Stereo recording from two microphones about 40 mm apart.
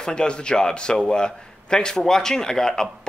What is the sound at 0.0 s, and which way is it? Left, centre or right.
A man's voice, left.